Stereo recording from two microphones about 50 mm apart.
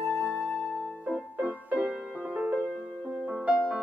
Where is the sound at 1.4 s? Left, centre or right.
Right.